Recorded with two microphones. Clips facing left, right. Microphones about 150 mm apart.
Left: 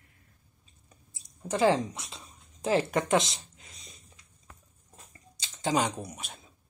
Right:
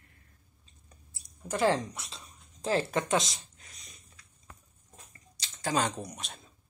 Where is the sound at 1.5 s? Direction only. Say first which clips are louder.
Left 3 dB; 20° left (ahead or behind).